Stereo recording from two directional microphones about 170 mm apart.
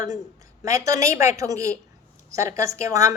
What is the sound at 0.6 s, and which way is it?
A woman's voice, 20° right (ahead or behind).